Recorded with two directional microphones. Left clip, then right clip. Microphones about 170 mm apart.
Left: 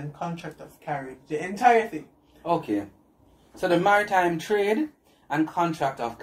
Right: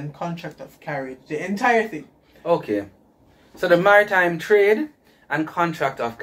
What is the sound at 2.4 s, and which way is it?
Speech, 25° left (ahead or behind).